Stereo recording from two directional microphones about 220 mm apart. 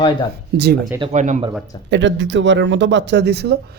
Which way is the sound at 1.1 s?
35° right (ahead or behind).